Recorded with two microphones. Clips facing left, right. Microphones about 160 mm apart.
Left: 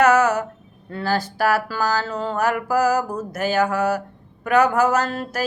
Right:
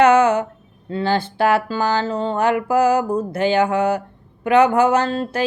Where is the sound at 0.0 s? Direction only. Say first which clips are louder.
Right 3 dB; 25° right (ahead or behind).